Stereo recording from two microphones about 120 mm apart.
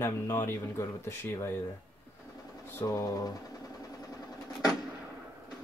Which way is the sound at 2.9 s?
30° left (ahead or behind).